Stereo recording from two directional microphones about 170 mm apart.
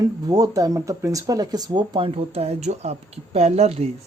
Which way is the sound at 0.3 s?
20° right (ahead or behind).